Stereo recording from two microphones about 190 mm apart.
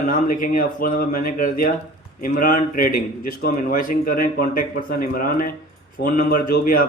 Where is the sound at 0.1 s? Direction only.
45° left (ahead or behind).